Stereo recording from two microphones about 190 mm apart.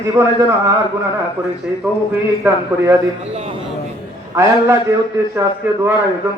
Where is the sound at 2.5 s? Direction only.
10° right (ahead or behind).